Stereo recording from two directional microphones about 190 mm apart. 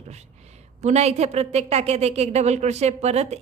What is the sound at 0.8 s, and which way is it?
A woman's voice, 35° right (ahead or behind).